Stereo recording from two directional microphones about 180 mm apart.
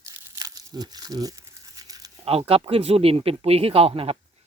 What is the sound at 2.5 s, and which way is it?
Speech, 30° right (ahead or behind).